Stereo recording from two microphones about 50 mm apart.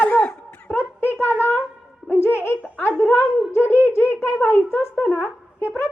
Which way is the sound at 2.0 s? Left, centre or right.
Left.